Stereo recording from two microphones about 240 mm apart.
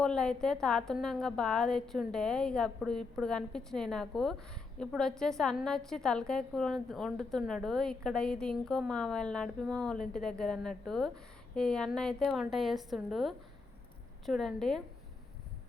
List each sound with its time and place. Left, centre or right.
0.0 s a woman's voice: centre